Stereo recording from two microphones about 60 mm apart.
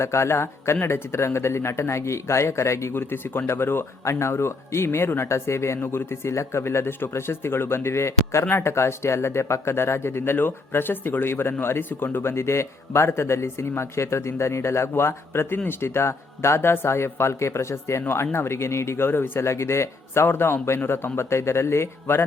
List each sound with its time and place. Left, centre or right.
0.0 s a man's voice: left
18.0 s a man's voice: left